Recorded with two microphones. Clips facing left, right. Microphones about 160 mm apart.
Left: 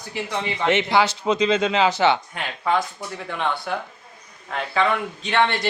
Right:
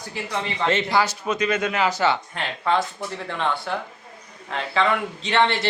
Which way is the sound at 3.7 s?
10° left (ahead or behind).